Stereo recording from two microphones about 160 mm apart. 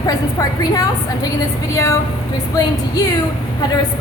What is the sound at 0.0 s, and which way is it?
A woman's voice, 25° left (ahead or behind).